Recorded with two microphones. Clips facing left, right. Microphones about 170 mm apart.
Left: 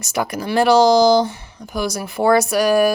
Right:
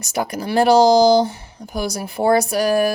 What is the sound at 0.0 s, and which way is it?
Speech, 35° right (ahead or behind).